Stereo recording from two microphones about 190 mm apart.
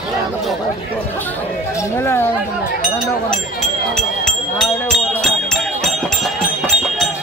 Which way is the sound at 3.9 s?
5° left (ahead or behind).